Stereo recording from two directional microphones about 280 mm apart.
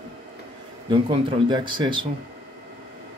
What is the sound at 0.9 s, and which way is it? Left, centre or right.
Speech, centre.